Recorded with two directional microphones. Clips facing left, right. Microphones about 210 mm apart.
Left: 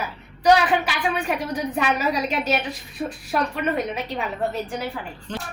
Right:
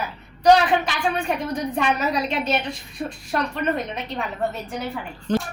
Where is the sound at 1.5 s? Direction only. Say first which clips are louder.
Even; 5° left (ahead or behind).